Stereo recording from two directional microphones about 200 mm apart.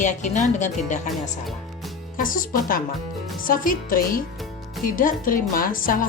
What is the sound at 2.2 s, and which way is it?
A woman's voice, 45° left (ahead or behind).